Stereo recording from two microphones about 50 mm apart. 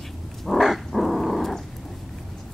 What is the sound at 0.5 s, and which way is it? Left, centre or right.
Dog, centre.